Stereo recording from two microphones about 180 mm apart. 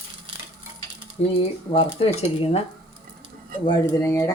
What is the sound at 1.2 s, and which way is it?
Speech, 35° left (ahead or behind).